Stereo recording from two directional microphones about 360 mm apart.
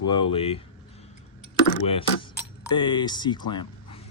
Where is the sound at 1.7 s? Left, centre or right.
Centre.